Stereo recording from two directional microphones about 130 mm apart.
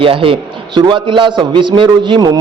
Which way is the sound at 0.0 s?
45° right (ahead or behind).